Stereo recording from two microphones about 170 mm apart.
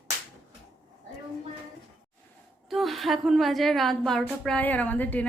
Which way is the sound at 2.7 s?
Centre (ahead or behind).